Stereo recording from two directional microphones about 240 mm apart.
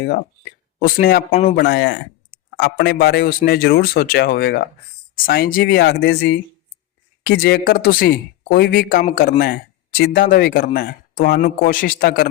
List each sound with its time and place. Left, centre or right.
0.0 s speech: left
1.5 s speech: left